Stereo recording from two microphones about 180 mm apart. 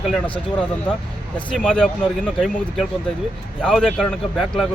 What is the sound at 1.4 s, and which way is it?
Speech, 5° left (ahead or behind).